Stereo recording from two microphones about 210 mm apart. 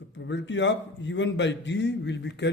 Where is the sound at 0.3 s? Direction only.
60° left (ahead or behind).